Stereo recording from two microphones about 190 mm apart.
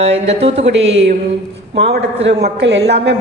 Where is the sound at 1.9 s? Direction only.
70° right (ahead or behind).